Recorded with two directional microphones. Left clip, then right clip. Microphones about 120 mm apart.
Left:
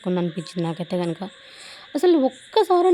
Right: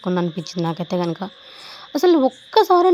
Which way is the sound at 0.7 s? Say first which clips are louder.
Right 3 dB; 10° right (ahead or behind).